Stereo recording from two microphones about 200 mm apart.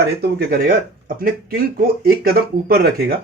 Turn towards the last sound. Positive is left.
turn(degrees=-50)  # may be behind; listen again after turning